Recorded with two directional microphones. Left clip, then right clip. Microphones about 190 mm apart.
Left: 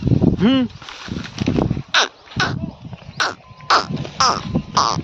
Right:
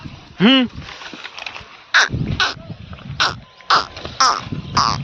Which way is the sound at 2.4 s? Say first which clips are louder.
Right 1 dB; 30° left (ahead or behind).